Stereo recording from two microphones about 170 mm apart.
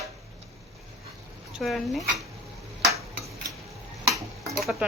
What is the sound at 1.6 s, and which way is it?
Speech, centre (ahead or behind).